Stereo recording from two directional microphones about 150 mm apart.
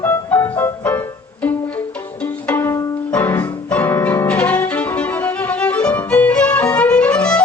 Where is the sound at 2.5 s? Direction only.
15° left (ahead or behind).